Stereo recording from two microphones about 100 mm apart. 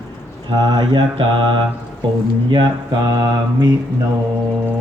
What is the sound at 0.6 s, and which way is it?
Speech, 50° right (ahead or behind).